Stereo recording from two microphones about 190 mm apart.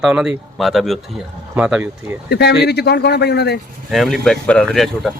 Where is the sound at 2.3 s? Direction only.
60° left (ahead or behind).